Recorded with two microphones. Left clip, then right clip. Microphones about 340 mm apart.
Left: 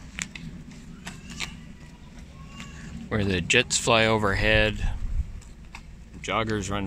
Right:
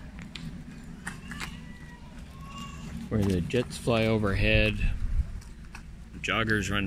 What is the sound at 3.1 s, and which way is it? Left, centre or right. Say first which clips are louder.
Speech: left 7 dB; left.